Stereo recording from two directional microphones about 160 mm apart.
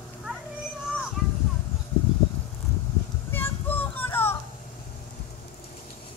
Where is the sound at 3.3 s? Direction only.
10° left (ahead or behind).